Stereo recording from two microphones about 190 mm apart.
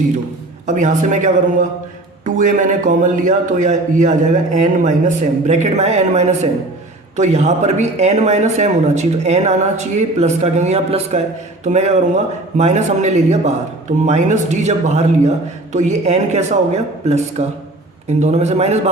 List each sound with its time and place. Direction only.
0.7 s a man's voice: 40° right (ahead or behind)